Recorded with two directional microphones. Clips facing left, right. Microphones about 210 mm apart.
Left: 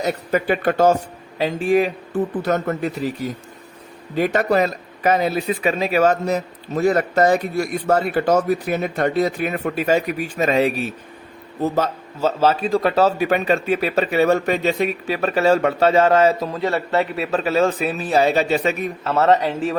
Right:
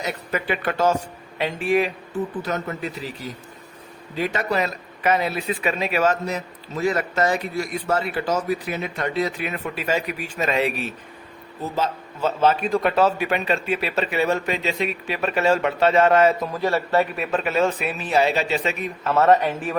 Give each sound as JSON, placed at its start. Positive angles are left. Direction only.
{"t": 0.0, "sound": "speech", "side_deg": 40}
{"t": 2.4, "sound": "speech", "side_deg": 50}
{"t": 4.1, "sound": "speech", "side_deg": 50}
{"t": 19.0, "sound": "speech", "side_deg": 30}